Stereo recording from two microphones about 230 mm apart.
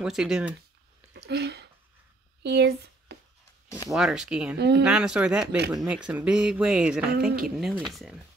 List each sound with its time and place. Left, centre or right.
0.0 s speech: centre
1.1 s a sound: right
2.4 s speech: right
3.9 s speech: centre
4.6 s speech: right
4.8 s speech: centre